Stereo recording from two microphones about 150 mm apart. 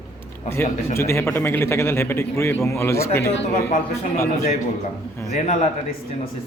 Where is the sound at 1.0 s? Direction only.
20° left (ahead or behind).